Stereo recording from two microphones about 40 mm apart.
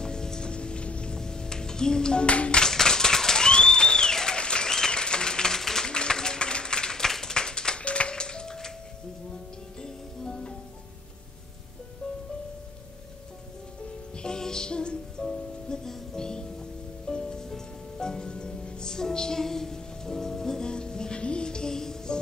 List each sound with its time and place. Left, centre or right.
0.0 s music: centre
2.2 s music: left
2.6 s applause: centre
5.9 s a sound: centre
9.8 s music: centre
14.1 s music: centre
15.2 s music: centre